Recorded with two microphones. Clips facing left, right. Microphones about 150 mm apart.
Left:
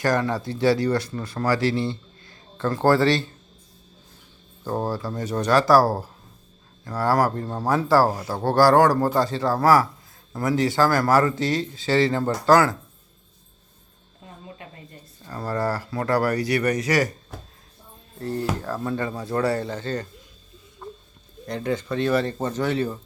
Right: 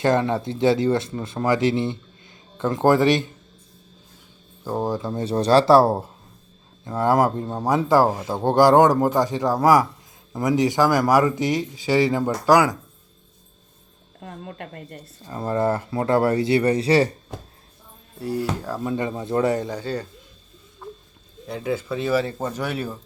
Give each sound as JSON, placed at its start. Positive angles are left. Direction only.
{"t": 0.0, "sound": "speech", "side_deg": -20}
{"t": 4.6, "sound": "speech", "side_deg": -10}
{"t": 14.2, "sound": "speech", "side_deg": -60}
{"t": 15.3, "sound": "speech", "side_deg": -20}
{"t": 18.2, "sound": "speech", "side_deg": -10}
{"t": 20.8, "sound": "a sound", "side_deg": 0}
{"t": 21.4, "sound": "speech", "side_deg": -5}